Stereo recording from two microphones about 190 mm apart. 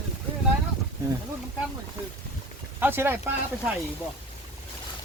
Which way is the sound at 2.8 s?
10° right (ahead or behind).